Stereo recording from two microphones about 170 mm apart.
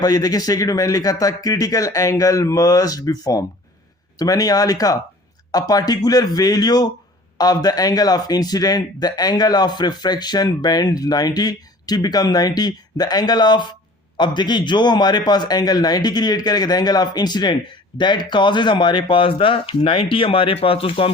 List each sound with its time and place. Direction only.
0.0 s a man's voice: 20° left (ahead or behind)